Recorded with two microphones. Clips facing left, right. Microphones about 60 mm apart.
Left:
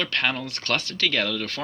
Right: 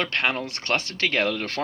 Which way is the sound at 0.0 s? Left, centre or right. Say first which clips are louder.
Right 1 dB; right.